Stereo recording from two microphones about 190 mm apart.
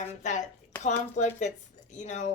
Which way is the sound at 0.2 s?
40° left (ahead or behind).